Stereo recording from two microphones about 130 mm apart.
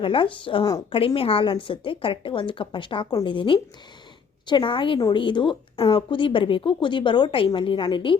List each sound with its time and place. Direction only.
0.0 s a woman's voice: 40° left (ahead or behind)